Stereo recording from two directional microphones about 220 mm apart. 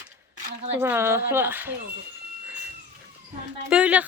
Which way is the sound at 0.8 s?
10° right (ahead or behind).